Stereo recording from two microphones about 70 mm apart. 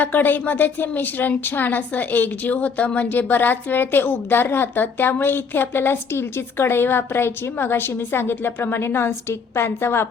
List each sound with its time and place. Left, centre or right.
0.0 s a woman's voice: left